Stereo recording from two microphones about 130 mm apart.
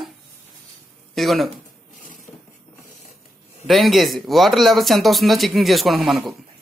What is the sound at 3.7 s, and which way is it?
Speech, centre (ahead or behind).